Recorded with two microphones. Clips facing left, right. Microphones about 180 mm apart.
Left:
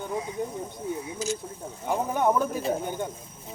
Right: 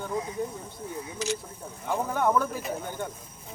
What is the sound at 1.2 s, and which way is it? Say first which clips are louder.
Speech: right 1 dB; 70° right (ahead or behind).